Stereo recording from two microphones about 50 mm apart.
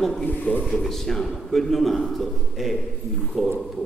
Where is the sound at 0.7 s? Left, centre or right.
Centre.